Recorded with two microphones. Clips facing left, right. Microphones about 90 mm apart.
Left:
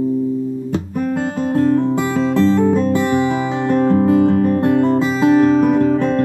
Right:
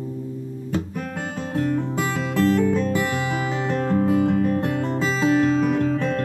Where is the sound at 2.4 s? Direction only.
25° left (ahead or behind).